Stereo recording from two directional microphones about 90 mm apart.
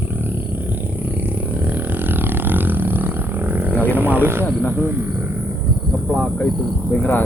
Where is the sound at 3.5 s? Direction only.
20° right (ahead or behind).